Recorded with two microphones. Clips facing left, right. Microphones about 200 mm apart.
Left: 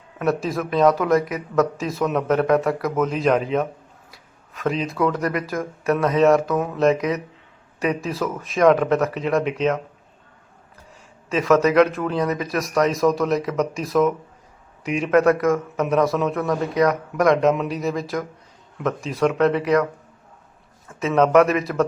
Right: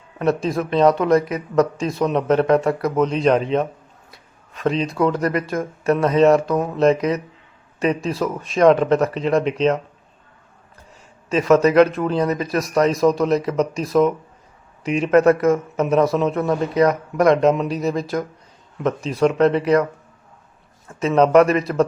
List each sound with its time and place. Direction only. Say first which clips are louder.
0.4 s a man's voice: right 1 dB; centre (ahead or behind)
2.3 s speech: right 2 dB; 30° right (ahead or behind)
3.0 s a man's voice: right 3 dB; centre (ahead or behind)
4.1 s a sound: right 1 dB; centre (ahead or behind)
5.1 s a man's voice: right 3 dB; centre (ahead or behind)
11.3 s a man's voice: right 2 dB; centre (ahead or behind)
21.0 s a man's voice: right 2 dB; centre (ahead or behind)